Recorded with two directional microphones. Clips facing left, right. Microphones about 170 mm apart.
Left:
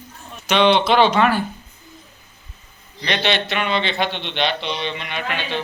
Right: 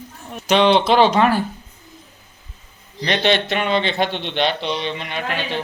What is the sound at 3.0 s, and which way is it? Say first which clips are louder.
Speech: right 3 dB; 40° right (ahead or behind).